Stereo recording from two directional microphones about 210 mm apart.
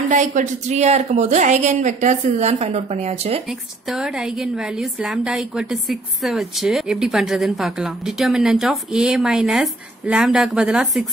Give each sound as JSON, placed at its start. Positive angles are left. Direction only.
{"t": 0.1, "sound": "a woman's voice", "side_deg": -35}
{"t": 3.4, "sound": "a woman's voice", "side_deg": 0}